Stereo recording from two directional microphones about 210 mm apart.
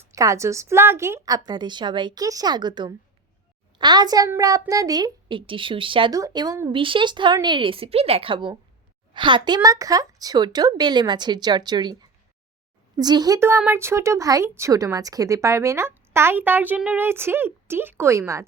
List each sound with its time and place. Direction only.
0.0 s a child's voice: 15° right (ahead or behind)